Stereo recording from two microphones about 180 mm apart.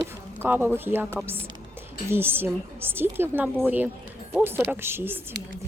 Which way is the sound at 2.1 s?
10° right (ahead or behind).